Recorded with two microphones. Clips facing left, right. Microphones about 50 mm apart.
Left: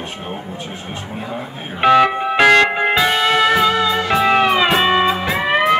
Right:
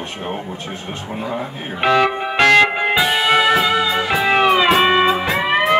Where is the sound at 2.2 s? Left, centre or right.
Centre.